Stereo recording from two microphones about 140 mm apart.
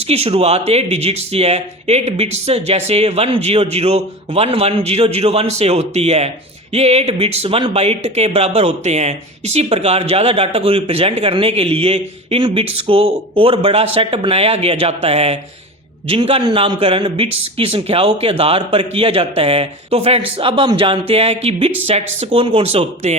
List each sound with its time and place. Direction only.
0.0 s speech: 45° right (ahead or behind)